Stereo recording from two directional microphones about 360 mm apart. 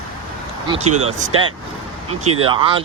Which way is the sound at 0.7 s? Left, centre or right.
Centre.